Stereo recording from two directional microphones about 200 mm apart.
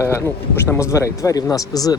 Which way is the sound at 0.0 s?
10° left (ahead or behind).